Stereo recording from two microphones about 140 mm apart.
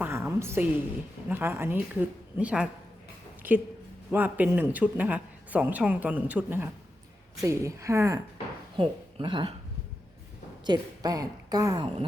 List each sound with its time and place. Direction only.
0.0 s a sound: 15° right (ahead or behind)
1.3 s speech: 15° right (ahead or behind)
4.1 s a woman's voice: 15° right (ahead or behind)
8.7 s speech: 35° right (ahead or behind)
10.7 s a woman's voice: 25° right (ahead or behind)